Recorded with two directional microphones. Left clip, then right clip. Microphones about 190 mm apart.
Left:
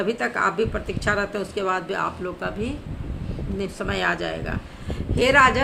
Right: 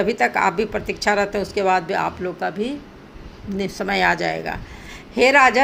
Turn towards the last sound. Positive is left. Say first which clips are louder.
# right 3 dB
turn(degrees=-25)  # may be behind; listen again after turning